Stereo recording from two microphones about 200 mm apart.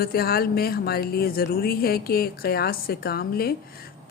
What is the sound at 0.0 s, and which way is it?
A woman's voice, 50° left (ahead or behind).